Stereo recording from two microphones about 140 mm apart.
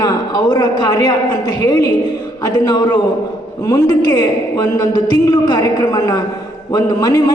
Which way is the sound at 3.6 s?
25° left (ahead or behind).